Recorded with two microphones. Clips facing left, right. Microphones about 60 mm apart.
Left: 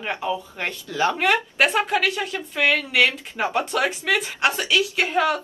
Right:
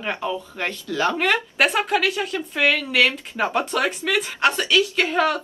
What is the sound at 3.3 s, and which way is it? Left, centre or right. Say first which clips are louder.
A woman's voice: right 1 dB; centre.